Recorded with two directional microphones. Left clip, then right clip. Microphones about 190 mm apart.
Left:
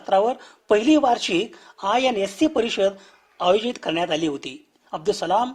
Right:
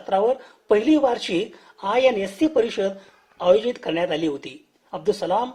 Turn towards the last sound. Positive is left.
turn(degrees=25)  # may be behind; listen again after turning